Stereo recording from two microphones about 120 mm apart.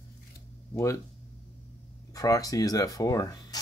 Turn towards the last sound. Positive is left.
turn(degrees=30)  # may be behind; listen again after turning